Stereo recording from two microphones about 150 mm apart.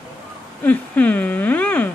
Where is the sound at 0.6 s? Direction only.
10° left (ahead or behind).